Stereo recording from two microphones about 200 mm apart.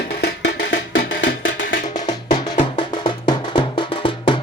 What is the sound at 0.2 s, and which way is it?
Music, 55° left (ahead or behind).